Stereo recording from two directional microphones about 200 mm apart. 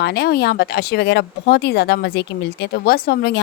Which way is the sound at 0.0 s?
55° left (ahead or behind).